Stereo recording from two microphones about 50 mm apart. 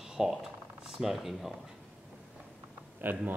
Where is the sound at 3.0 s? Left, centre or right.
Right.